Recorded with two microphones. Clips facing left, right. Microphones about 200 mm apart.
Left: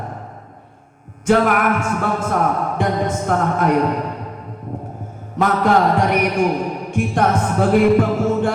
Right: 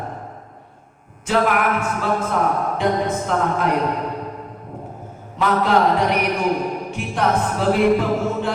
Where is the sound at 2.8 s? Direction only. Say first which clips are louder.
Even; 50° left (ahead or behind).